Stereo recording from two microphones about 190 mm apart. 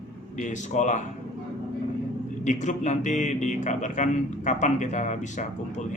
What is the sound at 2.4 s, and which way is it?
Speech, 40° left (ahead or behind).